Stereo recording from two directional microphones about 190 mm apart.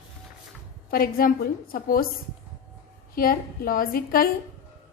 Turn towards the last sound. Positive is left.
turn(degrees=50)  # may be behind; listen again after turning